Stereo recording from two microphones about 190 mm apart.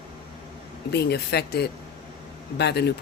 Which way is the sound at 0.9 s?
60° left (ahead or behind).